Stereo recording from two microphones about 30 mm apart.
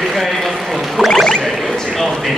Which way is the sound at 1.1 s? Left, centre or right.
Centre.